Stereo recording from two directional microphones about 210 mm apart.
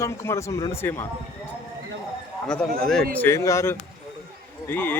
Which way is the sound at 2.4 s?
5° left (ahead or behind).